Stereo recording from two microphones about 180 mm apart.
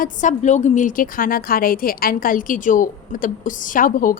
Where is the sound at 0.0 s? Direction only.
45° left (ahead or behind).